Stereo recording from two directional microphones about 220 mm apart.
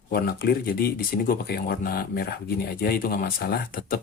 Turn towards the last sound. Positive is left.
turn(degrees=40)  # may be behind; listen again after turning